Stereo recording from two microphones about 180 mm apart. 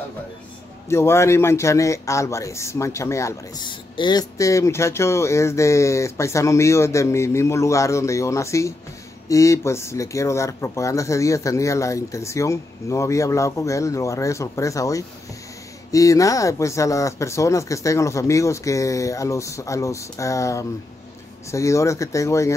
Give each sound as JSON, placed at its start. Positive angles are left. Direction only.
{"t": 0.8, "sound": "speech", "side_deg": 15}